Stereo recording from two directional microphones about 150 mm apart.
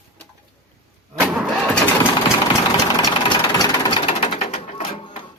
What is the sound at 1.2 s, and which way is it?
Engine starting, 10° right (ahead or behind).